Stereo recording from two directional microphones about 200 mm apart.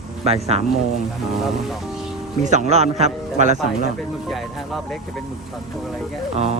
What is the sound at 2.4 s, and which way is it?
Speech, 35° right (ahead or behind).